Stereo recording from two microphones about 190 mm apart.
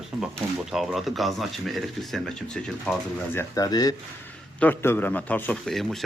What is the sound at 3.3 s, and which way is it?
A man's voice, 15° left (ahead or behind).